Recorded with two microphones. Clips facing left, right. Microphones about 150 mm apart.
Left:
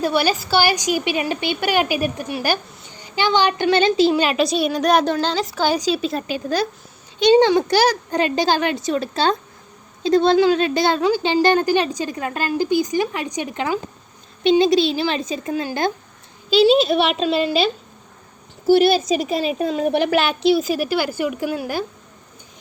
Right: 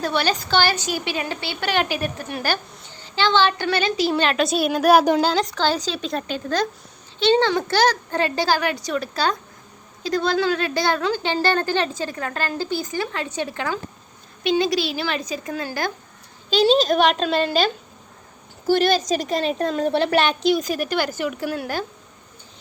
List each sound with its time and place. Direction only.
0.0 s a woman's voice: 10° left (ahead or behind); by 4.1 s 25° left (ahead or behind)
4.1 s a woman's voice: 5° left (ahead or behind)
16.5 s a child's voice: 5° left (ahead or behind)
18.7 s a woman's voice: 10° left (ahead or behind)
20.1 s a woman's voice: centre (ahead or behind)